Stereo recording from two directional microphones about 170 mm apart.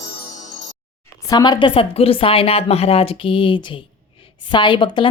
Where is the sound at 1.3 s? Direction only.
25° left (ahead or behind).